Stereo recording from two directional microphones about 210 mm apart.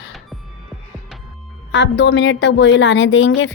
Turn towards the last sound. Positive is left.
turn(degrees=60)  # may be behind; listen again after turning